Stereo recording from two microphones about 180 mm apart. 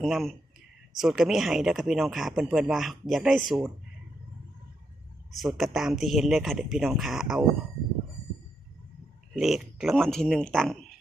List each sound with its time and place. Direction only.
0.0 s speech: centre (ahead or behind)
5.4 s speech: centre (ahead or behind)
9.3 s speech: centre (ahead or behind)